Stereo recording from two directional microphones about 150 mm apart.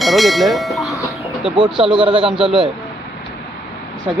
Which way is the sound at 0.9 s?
20° left (ahead or behind).